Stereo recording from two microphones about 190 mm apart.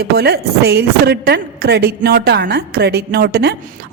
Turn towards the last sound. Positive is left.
turn(degrees=-55)  # may be behind; listen again after turning